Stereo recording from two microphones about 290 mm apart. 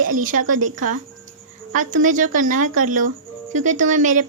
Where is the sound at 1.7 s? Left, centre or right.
Right.